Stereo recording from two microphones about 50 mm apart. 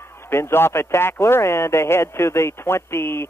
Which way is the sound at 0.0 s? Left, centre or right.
Left.